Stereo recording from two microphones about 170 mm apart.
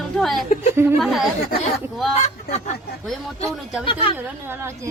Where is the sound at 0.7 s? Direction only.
15° right (ahead or behind).